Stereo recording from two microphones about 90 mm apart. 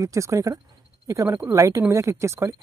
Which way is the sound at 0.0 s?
35° right (ahead or behind).